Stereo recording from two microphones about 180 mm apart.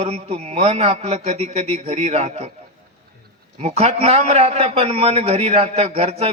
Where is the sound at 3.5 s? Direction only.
35° right (ahead or behind).